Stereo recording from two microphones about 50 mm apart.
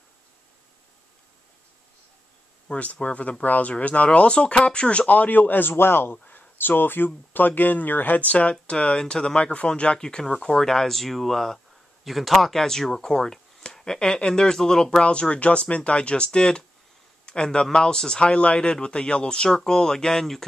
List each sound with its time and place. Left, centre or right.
2.7 s speech: left
6.2 s a sound: left
7.3 s speech: left; by 20.4 s centre